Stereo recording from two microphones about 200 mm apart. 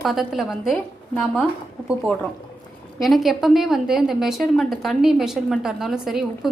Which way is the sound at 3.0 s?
Centre (ahead or behind).